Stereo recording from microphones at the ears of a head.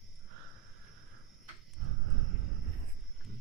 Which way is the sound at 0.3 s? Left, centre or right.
Right.